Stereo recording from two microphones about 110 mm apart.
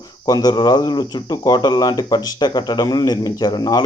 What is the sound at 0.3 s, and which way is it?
Speech, 40° left (ahead or behind).